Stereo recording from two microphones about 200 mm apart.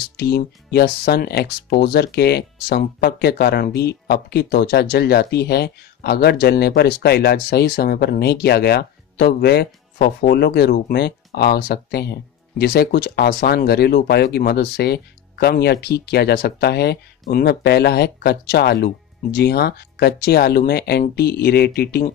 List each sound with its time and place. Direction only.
0.2 s speech: 55° left (ahead or behind)